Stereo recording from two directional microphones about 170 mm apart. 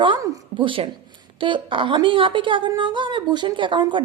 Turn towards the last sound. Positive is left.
turn(degrees=-30)  # may be behind; listen again after turning